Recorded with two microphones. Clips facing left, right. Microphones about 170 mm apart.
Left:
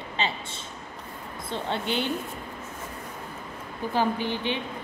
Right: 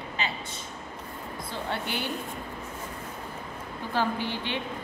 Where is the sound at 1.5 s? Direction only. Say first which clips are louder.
Left 4 dB; 20° left (ahead or behind).